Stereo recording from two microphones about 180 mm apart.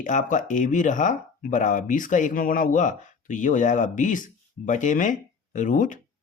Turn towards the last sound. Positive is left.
turn(degrees=45)  # may be behind; listen again after turning